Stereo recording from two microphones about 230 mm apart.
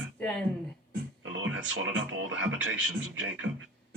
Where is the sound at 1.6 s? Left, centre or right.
Right.